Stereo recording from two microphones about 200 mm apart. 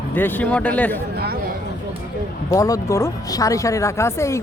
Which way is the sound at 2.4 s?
15° left (ahead or behind).